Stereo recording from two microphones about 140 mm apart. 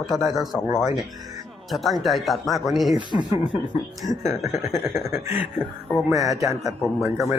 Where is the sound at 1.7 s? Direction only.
Centre (ahead or behind).